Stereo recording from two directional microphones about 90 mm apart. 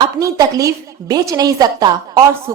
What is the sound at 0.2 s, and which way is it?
A woman's voice, 40° right (ahead or behind).